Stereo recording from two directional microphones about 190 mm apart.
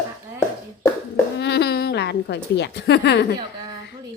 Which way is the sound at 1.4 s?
60° left (ahead or behind).